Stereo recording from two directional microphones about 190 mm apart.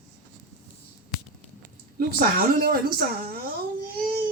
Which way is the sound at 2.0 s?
50° right (ahead or behind).